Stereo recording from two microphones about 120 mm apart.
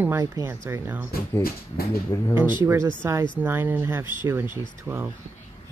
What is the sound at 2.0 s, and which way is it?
Speech, 25° left (ahead or behind).